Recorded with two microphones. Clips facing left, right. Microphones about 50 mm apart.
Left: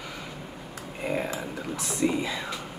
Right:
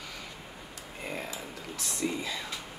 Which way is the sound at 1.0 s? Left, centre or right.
Left.